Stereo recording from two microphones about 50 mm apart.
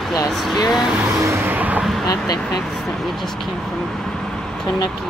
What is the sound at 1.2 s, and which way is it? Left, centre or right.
Vehicle, right.